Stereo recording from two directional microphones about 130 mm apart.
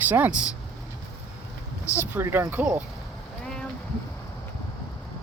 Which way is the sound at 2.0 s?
15° right (ahead or behind).